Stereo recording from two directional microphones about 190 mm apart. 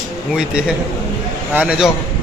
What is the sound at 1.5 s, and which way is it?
Speech, 5° right (ahead or behind).